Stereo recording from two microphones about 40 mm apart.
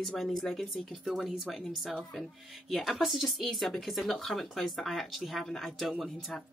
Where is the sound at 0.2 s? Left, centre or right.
Centre.